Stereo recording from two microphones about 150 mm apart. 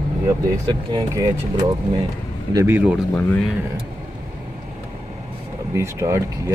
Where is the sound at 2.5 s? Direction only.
20° right (ahead or behind).